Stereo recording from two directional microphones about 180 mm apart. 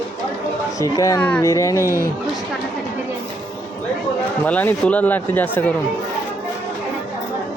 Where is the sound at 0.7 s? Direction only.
20° left (ahead or behind).